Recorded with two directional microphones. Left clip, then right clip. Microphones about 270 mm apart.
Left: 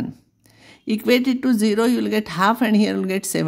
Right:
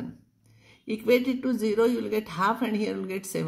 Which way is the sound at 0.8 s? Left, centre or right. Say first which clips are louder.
Left 5 dB; left.